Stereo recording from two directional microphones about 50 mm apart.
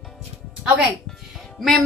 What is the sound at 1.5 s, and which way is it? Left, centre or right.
Music, centre.